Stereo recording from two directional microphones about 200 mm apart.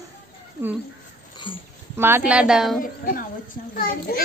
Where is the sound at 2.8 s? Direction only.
45° left (ahead or behind).